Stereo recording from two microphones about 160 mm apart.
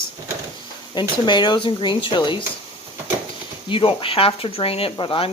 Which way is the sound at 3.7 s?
35° left (ahead or behind).